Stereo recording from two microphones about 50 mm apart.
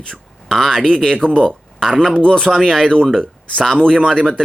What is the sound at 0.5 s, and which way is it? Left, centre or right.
Speech, centre.